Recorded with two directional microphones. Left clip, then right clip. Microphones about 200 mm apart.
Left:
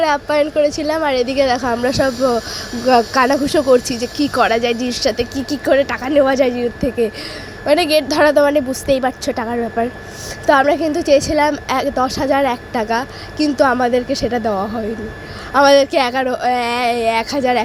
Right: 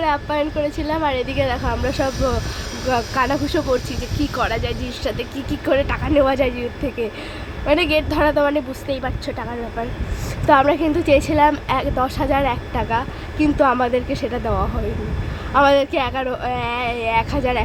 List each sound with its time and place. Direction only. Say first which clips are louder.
0.0 s speech: left 5 dB; 25° left (ahead or behind)
10.4 s a woman's voice: left 2 dB; 10° left (ahead or behind)